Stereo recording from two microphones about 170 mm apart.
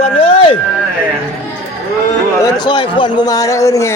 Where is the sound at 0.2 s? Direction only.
35° left (ahead or behind).